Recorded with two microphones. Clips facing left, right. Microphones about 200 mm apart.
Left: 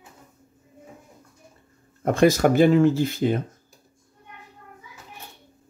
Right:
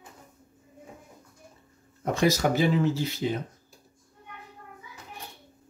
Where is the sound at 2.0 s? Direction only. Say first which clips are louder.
Left 6 dB; 55° left (ahead or behind).